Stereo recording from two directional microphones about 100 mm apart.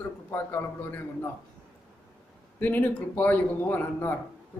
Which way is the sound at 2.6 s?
20° left (ahead or behind).